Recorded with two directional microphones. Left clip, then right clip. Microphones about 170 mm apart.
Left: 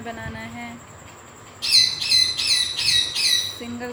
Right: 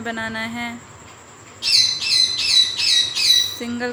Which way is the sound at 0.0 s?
35° right (ahead or behind).